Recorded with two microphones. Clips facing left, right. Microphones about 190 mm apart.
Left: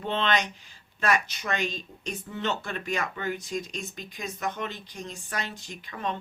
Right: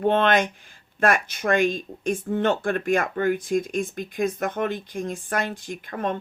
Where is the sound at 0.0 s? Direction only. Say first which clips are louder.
Right 8 dB; 50° right (ahead or behind).